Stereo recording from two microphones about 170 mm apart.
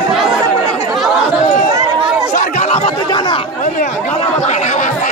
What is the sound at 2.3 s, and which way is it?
Chatter, 45° left (ahead or behind).